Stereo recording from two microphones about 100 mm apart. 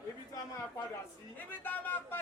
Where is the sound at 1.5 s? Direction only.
20° left (ahead or behind).